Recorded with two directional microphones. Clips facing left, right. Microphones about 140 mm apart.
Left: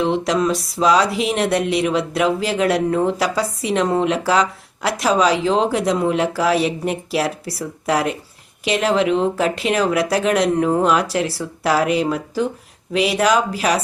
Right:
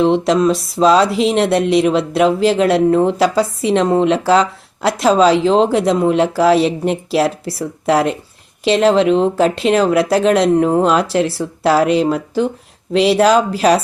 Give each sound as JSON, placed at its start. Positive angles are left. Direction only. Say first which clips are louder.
{"t": 0.0, "sound": "speech", "louder": "right 5 dB", "side_deg": -25}